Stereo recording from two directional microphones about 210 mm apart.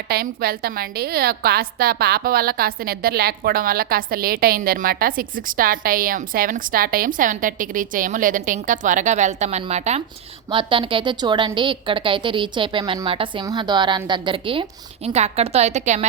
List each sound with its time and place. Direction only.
0.1 s a woman's voice: 45° right (ahead or behind)